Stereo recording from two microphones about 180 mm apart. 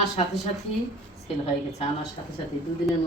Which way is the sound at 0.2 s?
35° left (ahead or behind).